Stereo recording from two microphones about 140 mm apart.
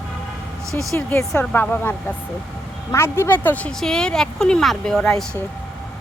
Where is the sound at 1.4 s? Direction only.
15° left (ahead or behind).